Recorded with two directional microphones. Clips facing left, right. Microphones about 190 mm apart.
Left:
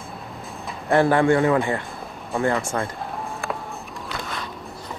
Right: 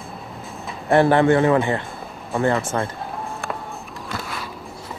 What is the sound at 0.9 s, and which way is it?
Speech, 25° right (ahead or behind).